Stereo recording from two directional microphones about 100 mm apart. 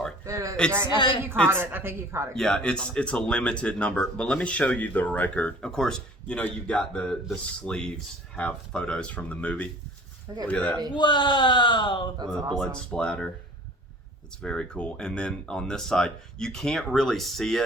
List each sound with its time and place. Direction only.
0.3 s a man's voice: 30° right (ahead or behind)
0.9 s speech: 55° left (ahead or behind)
1.5 s speech: 20° right (ahead or behind)
2.3 s speech: 5° left (ahead or behind)
10.9 s speech: 55° left (ahead or behind)
12.5 s speech: 10° left (ahead or behind)
14.4 s speech: 10° left (ahead or behind)